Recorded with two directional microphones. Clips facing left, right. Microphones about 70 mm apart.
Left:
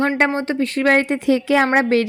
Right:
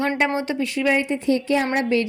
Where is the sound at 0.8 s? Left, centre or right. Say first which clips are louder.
Left 4 dB; left.